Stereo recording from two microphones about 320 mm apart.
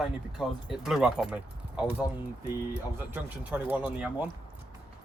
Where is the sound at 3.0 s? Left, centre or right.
Centre.